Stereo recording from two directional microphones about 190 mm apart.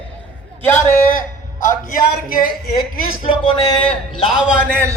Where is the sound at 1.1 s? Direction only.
45° left (ahead or behind).